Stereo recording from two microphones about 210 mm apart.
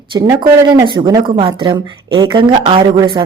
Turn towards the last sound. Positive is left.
turn(degrees=-20)  # may be behind; listen again after turning